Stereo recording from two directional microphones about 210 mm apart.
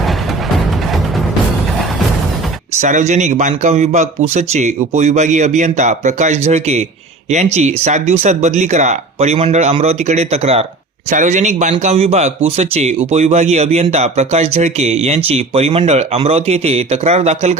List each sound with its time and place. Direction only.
2.8 s speech: 35° right (ahead or behind)